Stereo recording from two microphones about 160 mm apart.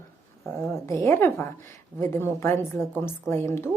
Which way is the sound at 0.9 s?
15° left (ahead or behind).